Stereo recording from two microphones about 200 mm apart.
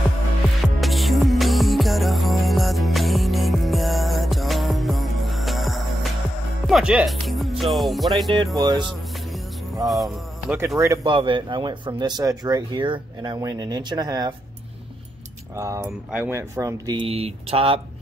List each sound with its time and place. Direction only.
0.7 s music: centre (ahead or behind)
6.7 s speech: 5° right (ahead or behind)
8.5 s speech: 20° right (ahead or behind)
9.8 s music: centre (ahead or behind)
11.1 s speech: 25° right (ahead or behind)
15.5 s speech: 15° right (ahead or behind)